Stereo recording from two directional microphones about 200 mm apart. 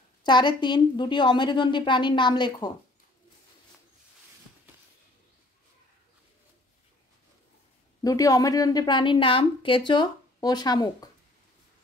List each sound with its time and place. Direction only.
0.2 s a woman's voice: 20° left (ahead or behind)
8.0 s a woman's voice: 15° left (ahead or behind)